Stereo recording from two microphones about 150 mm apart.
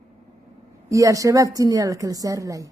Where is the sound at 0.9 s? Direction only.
20° right (ahead or behind).